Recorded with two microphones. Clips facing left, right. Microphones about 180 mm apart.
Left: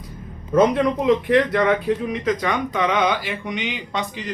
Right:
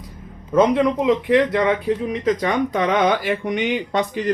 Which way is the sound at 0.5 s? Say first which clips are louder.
Right 1 dB; 20° right (ahead or behind).